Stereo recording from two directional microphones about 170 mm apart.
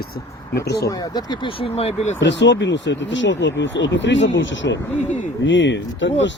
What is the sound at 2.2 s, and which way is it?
Speech, 90° left.